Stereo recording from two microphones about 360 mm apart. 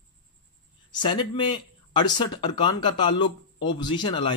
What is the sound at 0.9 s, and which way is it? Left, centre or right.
Speech, centre.